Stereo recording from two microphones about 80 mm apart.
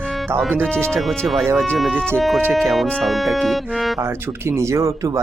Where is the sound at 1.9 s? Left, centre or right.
Right.